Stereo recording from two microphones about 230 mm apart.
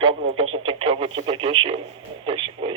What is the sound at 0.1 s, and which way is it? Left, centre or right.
Speech, right.